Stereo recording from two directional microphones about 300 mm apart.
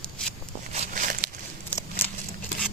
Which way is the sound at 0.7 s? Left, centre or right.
Right.